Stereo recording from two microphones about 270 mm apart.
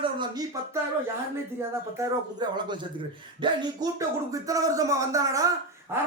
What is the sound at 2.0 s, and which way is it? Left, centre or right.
A man's voice, centre.